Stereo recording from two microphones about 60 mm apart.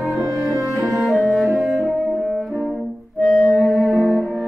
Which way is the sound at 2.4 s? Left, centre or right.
Centre.